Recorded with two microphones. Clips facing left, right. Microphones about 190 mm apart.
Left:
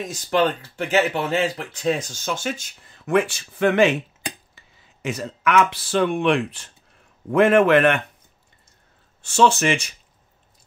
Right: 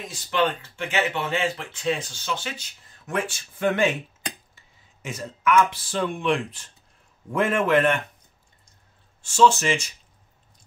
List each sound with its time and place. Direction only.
0.0 s speech: 40° left (ahead or behind)
3.1 s speech: 70° left (ahead or behind)
9.2 s speech: 65° left (ahead or behind)